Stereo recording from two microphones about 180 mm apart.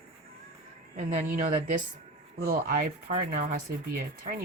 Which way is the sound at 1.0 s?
50° right (ahead or behind).